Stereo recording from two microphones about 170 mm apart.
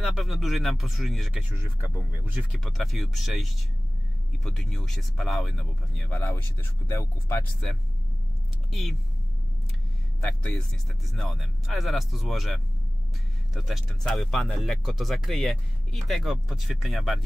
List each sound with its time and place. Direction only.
0.0 s speech: centre (ahead or behind)
6.9 s speech: 15° left (ahead or behind)
10.2 s speech: 5° left (ahead or behind)
13.6 s speech: centre (ahead or behind)